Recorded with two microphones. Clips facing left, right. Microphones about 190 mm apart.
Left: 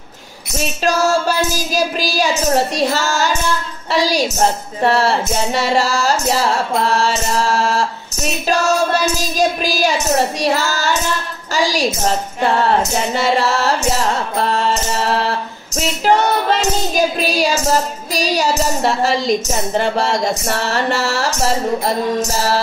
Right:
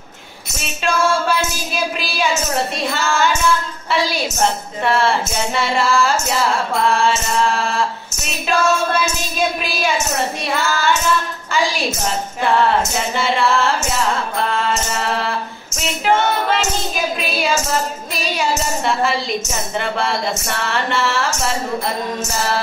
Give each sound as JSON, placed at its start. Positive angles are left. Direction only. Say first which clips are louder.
{"t": 0.6, "sound": "a woman's voice", "louder": "left 3 dB", "side_deg": 40}